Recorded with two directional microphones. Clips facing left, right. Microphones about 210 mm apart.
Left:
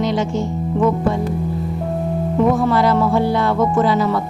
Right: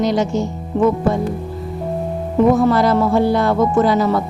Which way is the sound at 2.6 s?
40° right (ahead or behind).